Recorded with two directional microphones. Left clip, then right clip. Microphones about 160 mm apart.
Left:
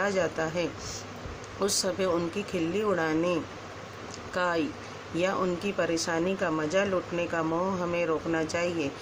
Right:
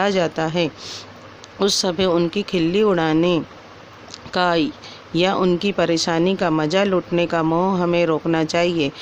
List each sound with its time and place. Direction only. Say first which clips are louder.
0.0 s speech: right 8 dB; 55° right (ahead or behind)